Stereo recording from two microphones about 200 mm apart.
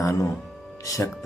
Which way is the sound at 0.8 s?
15° left (ahead or behind).